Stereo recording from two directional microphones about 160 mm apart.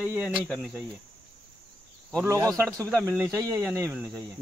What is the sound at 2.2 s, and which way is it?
Speech, 20° right (ahead or behind).